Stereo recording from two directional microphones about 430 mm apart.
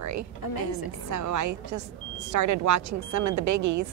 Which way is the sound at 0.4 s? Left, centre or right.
Left.